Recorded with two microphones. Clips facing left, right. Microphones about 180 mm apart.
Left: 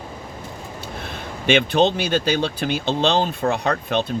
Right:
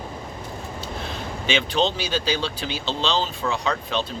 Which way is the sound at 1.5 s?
55° left (ahead or behind).